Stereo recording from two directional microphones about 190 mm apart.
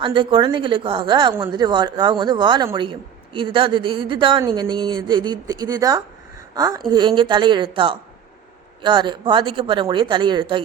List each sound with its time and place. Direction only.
0.0 s speech: 25° right (ahead or behind)